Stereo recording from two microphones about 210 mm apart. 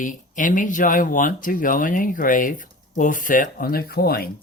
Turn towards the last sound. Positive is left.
turn(degrees=45)  # may be behind; listen again after turning